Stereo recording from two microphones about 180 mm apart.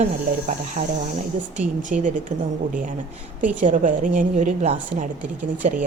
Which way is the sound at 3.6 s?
45° right (ahead or behind).